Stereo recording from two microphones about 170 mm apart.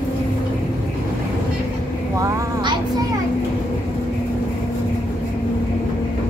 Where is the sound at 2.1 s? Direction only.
25° right (ahead or behind).